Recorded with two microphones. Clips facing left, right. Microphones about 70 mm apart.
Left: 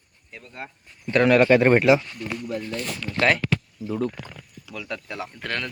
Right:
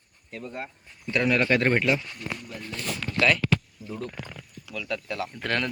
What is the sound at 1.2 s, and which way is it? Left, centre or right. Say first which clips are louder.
Speech: left 7 dB; left.